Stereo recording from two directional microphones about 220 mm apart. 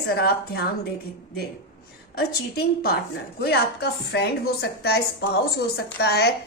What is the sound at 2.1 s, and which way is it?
A woman's voice, 45° left (ahead or behind).